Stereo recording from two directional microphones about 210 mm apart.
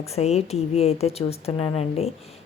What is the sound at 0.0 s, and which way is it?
Speech, 30° left (ahead or behind).